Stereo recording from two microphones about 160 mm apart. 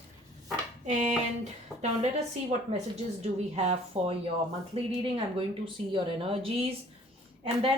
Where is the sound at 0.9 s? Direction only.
50° right (ahead or behind).